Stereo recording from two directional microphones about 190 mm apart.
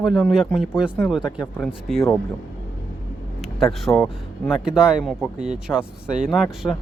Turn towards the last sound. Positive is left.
turn(degrees=0)  # may be behind; listen again after turning